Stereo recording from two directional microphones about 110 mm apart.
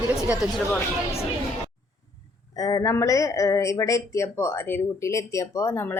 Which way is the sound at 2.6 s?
35° left (ahead or behind).